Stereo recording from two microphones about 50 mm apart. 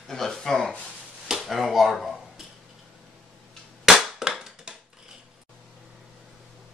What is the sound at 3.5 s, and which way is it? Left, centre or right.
Cap gun, centre.